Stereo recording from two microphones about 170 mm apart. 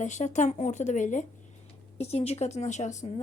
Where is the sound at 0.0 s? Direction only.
45° left (ahead or behind).